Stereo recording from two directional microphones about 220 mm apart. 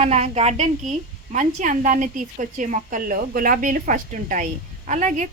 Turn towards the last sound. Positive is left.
turn(degrees=-35)  # may be behind; listen again after turning